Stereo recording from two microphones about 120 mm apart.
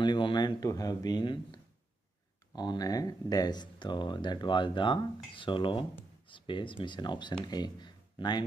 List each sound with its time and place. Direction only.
0.0 s speech: 40° left (ahead or behind)
0.6 s speech: 30° left (ahead or behind)